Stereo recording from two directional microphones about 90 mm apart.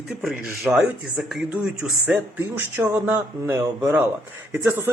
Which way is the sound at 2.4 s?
20° right (ahead or behind).